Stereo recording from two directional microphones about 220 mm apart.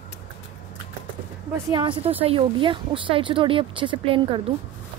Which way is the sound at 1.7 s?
20° right (ahead or behind).